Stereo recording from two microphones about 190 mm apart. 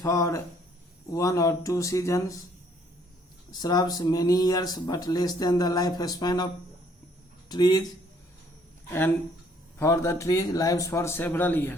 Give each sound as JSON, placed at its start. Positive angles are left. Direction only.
{"t": 0.0, "sound": "a man's voice", "side_deg": 15}
{"t": 3.5, "sound": "speech", "side_deg": 20}
{"t": 9.7, "sound": "a man's voice", "side_deg": 15}